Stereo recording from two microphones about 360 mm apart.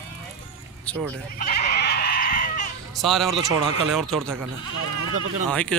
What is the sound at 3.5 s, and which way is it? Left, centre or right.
Speech, right.